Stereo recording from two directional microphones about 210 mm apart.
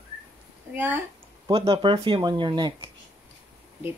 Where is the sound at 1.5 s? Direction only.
25° right (ahead or behind).